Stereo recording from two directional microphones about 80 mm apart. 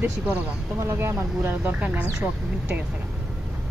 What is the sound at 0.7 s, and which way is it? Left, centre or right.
Speech, right.